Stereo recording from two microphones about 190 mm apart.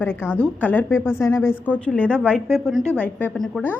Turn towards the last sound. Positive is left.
turn(degrees=5)  # may be behind; listen again after turning